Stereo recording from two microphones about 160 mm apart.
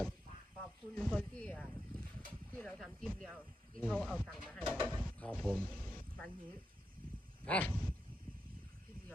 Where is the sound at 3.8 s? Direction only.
10° left (ahead or behind).